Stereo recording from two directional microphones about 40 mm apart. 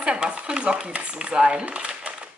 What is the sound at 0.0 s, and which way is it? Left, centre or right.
Speech, right.